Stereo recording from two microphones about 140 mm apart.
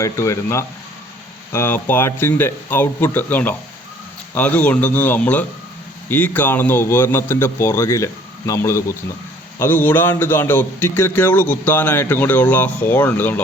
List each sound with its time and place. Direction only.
0.0 s a man's voice: 20° left (ahead or behind)